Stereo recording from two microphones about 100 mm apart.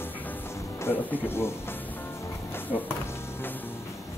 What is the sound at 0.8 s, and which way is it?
Speech, 20° left (ahead or behind).